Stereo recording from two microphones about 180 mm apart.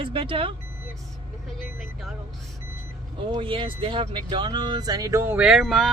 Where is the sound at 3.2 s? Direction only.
30° right (ahead or behind).